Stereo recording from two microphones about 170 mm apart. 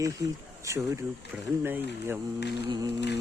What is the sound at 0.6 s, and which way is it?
Speech, 15° right (ahead or behind).